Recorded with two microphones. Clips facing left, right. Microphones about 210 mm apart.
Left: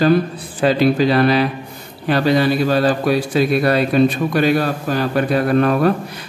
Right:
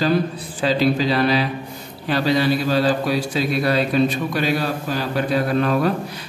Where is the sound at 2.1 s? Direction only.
55° left (ahead or behind).